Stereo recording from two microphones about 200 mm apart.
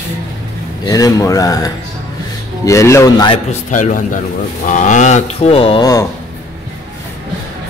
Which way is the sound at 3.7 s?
40° left (ahead or behind).